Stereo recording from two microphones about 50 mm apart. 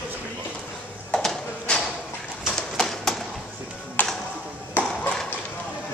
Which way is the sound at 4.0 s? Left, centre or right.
Left.